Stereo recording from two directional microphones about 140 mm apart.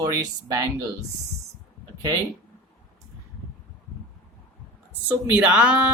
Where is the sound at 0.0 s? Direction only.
25° right (ahead or behind).